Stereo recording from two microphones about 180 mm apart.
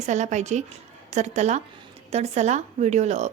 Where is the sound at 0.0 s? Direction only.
40° right (ahead or behind).